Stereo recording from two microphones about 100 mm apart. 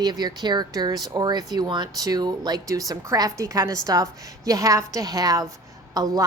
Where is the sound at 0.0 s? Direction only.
45° right (ahead or behind).